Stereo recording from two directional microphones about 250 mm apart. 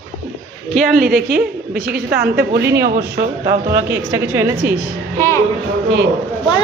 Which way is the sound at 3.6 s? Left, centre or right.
Centre.